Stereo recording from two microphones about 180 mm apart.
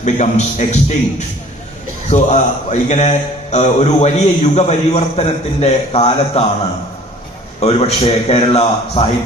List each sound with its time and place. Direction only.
0.0 s a man's voice: 40° left (ahead or behind)
2.0 s a man's voice: 40° left (ahead or behind)
7.6 s a man's voice: 35° left (ahead or behind)